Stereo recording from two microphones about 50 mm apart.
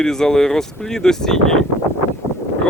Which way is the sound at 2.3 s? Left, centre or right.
Left.